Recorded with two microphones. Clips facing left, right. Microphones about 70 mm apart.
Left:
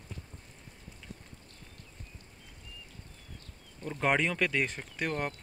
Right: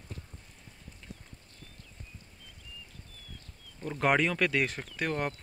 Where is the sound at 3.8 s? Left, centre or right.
Centre.